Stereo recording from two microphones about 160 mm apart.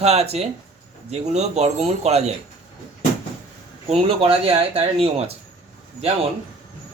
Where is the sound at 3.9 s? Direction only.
35° right (ahead or behind).